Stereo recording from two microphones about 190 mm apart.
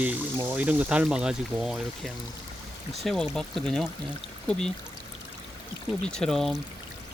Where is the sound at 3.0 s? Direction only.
Centre (ahead or behind).